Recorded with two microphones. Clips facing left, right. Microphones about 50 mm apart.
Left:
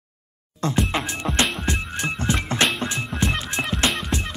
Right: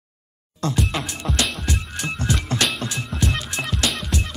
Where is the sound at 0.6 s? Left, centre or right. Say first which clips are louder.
Left 1 dB; left.